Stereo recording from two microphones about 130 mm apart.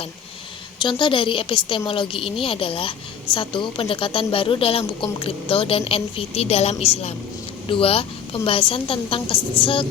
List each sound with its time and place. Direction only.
0.8 s a woman's voice: 40° left (ahead or behind)